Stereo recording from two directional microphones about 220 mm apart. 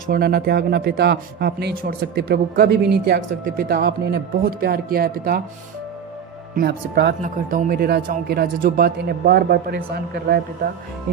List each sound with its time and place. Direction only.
0.1 s speech: 45° right (ahead or behind)
6.6 s speech: 45° right (ahead or behind)